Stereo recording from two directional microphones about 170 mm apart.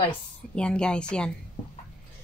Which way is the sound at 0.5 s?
5° left (ahead or behind).